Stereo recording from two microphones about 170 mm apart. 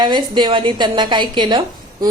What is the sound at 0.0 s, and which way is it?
A woman's voice, 30° right (ahead or behind).